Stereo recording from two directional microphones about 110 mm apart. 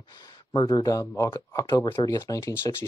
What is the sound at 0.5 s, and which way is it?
Speech, 40° left (ahead or behind).